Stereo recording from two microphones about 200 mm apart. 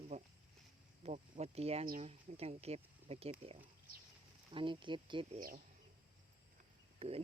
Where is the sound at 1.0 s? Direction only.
35° right (ahead or behind).